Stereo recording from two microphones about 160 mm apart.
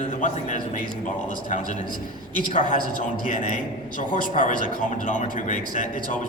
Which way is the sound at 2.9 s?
55° left (ahead or behind).